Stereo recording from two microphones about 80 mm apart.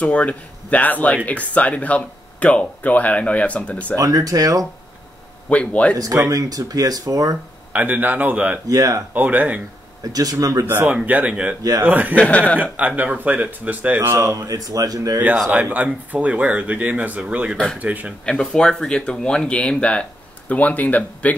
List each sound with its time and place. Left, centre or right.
0.0 s speech: centre
4.0 s speech: right
5.5 s speech: centre
6.3 s speech: right
7.7 s speech: right
8.6 s speech: right
9.1 s speech: right
10.0 s speech: right
10.6 s speech: right
12.2 s speech: centre
12.7 s speech: centre
14.1 s speech: right
15.7 s speech: centre
18.2 s speech: centre